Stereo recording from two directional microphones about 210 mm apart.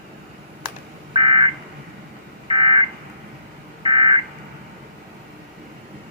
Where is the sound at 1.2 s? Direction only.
25° right (ahead or behind).